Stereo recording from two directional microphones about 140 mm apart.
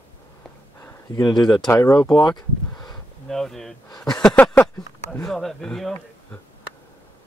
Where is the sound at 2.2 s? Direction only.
30° left (ahead or behind).